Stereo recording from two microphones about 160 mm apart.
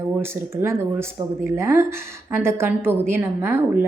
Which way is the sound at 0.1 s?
15° right (ahead or behind).